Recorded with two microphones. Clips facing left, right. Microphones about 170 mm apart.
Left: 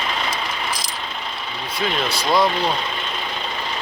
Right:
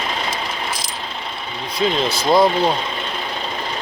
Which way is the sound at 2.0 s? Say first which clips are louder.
Right 4 dB; 25° right (ahead or behind).